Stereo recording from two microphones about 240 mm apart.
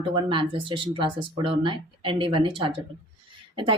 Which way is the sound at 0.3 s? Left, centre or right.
Right.